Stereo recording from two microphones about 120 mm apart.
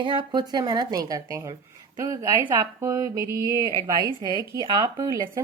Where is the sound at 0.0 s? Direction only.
40° right (ahead or behind).